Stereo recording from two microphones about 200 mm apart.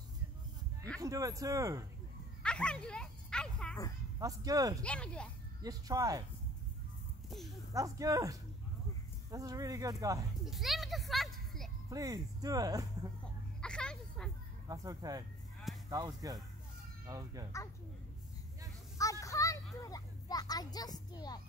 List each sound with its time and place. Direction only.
1.0 s speech: 15° right (ahead or behind)
2.4 s a sound: 5° left (ahead or behind)
4.2 s speech: 15° right (ahead or behind)
4.8 s speech: 5° left (ahead or behind)
5.6 s speech: 20° right (ahead or behind)
7.2 s speech: centre (ahead or behind)
7.7 s speech: 15° right (ahead or behind)
10.4 s a child's voice: centre (ahead or behind)
11.9 s speech: 15° right (ahead or behind)
13.6 s a sound: 5° left (ahead or behind)
14.7 s speech: 20° right (ahead or behind)
18.9 s a sound: 15° left (ahead or behind)